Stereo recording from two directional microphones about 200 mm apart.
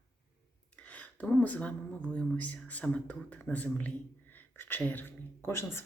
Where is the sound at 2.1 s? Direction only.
5° left (ahead or behind).